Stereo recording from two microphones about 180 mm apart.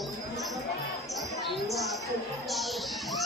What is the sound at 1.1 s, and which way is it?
Speech, centre (ahead or behind).